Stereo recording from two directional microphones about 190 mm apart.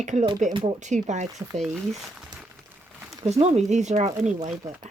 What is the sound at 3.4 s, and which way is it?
Speech, 35° right (ahead or behind).